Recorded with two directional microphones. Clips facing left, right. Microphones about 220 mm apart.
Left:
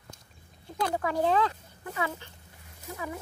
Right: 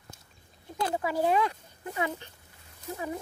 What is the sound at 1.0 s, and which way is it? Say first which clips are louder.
Speech: even; 10° right (ahead or behind).